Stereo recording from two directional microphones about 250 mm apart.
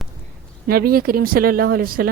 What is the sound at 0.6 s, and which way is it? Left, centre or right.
A woman's voice, right.